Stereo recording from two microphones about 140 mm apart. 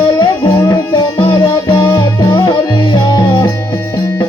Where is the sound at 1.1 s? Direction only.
40° left (ahead or behind).